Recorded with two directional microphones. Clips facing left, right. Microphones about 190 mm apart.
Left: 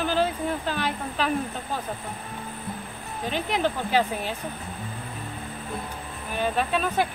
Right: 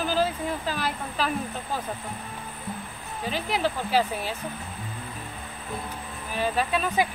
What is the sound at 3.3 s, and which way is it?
Speech, 5° right (ahead or behind).